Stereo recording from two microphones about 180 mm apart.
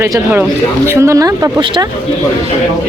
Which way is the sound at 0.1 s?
5° right (ahead or behind).